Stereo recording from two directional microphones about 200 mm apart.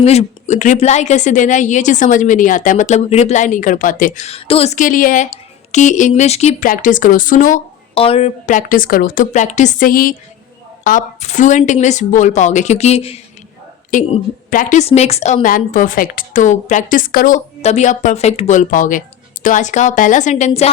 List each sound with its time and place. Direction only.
0.0 s a woman's voice: 30° left (ahead or behind)
7.9 s a woman's voice: 30° left (ahead or behind)